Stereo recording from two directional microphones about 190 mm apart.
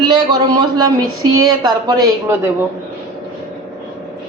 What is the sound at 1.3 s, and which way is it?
Speech, 20° right (ahead or behind).